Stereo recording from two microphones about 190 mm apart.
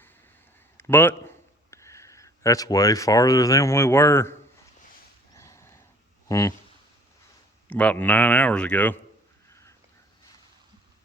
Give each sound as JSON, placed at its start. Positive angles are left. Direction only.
{"t": 0.8, "sound": "speech", "side_deg": 10}
{"t": 5.3, "sound": "a sound", "side_deg": 15}
{"t": 6.2, "sound": "speech", "side_deg": 15}
{"t": 7.7, "sound": "speech", "side_deg": 5}